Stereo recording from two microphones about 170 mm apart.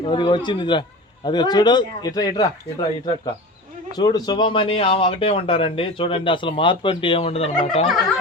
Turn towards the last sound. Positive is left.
turn(degrees=35)  # may be behind; listen again after turning